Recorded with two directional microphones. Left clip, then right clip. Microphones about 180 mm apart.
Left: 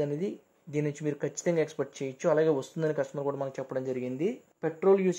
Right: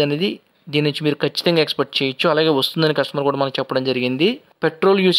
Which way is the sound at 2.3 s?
15° right (ahead or behind).